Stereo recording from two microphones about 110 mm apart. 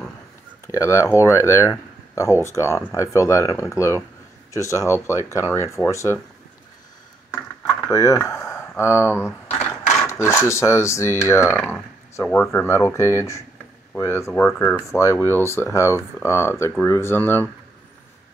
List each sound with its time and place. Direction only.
0.7 s speech: 25° left (ahead or behind)
7.9 s speech: 30° left (ahead or behind)